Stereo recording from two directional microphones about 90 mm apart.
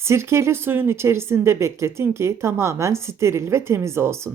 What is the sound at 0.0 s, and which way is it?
Speech, 30° right (ahead or behind).